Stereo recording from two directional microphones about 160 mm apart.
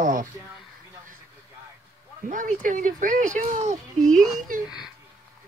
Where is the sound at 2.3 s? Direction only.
55° right (ahead or behind).